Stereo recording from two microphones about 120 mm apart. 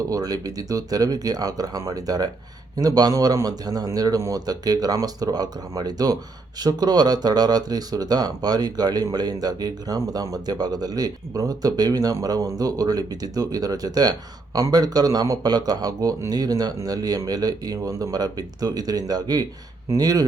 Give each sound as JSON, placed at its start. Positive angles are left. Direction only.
{"t": 0.1, "sound": "speech", "side_deg": -30}